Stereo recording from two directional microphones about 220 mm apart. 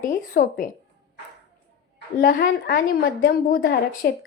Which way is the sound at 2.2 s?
45° left (ahead or behind).